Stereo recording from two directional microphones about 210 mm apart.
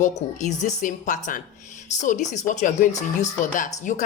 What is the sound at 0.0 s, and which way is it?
A woman's voice, 35° left (ahead or behind).